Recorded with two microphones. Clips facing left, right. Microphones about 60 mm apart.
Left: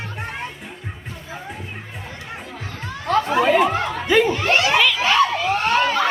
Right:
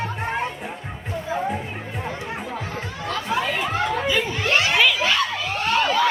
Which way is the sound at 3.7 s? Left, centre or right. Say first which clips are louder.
Even; centre.